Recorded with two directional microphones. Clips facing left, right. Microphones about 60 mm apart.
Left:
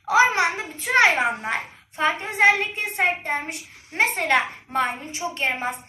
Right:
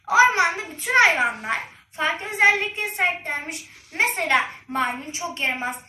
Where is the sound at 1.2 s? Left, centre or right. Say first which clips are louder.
Even; left.